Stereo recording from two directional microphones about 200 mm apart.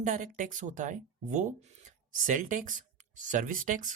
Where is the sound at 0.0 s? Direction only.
40° right (ahead or behind).